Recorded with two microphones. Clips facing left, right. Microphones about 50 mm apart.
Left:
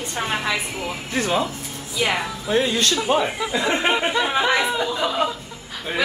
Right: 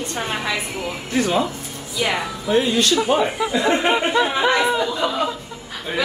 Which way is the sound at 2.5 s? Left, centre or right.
Centre.